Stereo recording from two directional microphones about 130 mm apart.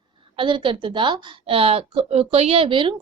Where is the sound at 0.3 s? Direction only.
40° right (ahead or behind).